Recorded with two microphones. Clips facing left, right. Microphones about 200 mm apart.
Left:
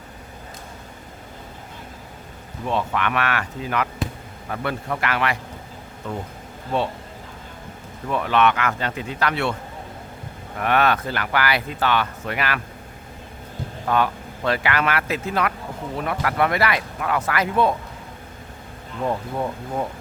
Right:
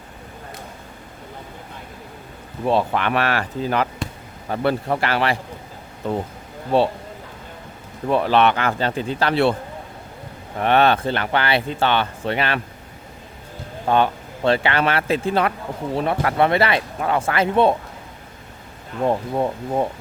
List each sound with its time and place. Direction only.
2.6 s a man's voice: 35° right (ahead or behind)
8.0 s a man's voice: 30° right (ahead or behind)
10.6 s speech: 30° right (ahead or behind)
13.8 s speech: 30° right (ahead or behind)
19.0 s speech: 30° right (ahead or behind)